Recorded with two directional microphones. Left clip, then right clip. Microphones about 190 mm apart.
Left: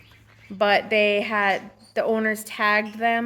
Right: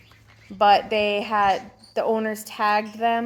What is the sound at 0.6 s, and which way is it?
A woman's voice, 20° left (ahead or behind).